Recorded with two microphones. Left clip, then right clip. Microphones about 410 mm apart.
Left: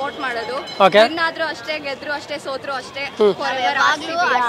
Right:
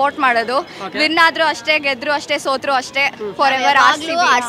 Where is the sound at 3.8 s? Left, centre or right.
Right.